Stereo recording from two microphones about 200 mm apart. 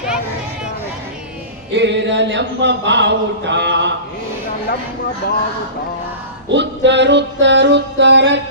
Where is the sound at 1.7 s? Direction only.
60° right (ahead or behind).